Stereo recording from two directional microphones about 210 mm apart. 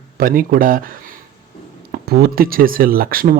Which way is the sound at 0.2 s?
45° right (ahead or behind).